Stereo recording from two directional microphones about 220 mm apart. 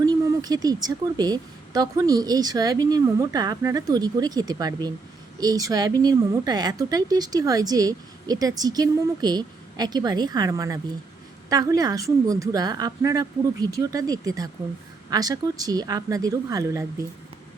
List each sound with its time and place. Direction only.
0.0 s a woman's voice: 15° right (ahead or behind)